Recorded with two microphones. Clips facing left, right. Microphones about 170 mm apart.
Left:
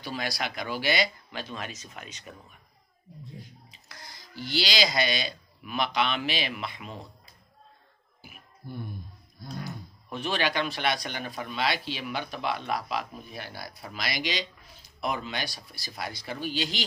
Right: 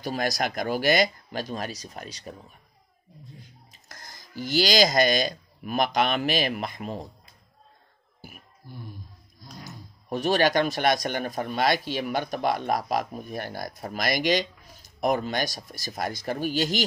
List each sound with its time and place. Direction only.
0.0 s speech: 45° right (ahead or behind)
3.7 s speech: 45° right (ahead or behind)
9.7 s speech: 40° right (ahead or behind)